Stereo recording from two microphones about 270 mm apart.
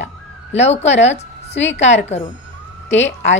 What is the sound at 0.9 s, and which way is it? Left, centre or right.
A woman's voice, left.